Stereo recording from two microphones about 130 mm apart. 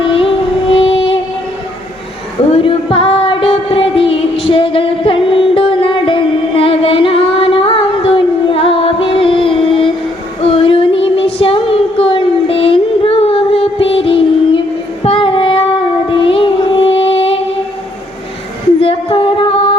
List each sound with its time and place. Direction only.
0.0 s music: 40° left (ahead or behind)
2.5 s music: 45° left (ahead or behind)
10.4 s child singing: 45° left (ahead or behind)
16.0 s music: 40° left (ahead or behind)
18.8 s female singing: 45° left (ahead or behind)